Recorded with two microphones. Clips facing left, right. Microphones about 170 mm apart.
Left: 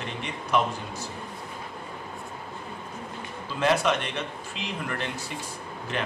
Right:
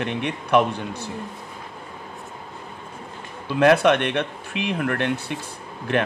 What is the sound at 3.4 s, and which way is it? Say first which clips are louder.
A man's voice: right 8 dB; 60° right (ahead or behind).